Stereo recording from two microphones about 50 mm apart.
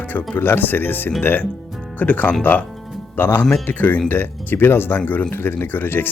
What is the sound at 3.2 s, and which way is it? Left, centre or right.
Speech, left.